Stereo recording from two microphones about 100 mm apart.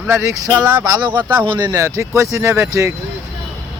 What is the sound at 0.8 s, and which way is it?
Speech, 40° right (ahead or behind).